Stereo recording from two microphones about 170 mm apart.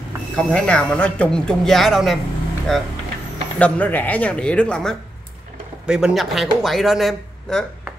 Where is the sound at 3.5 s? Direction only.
10° left (ahead or behind).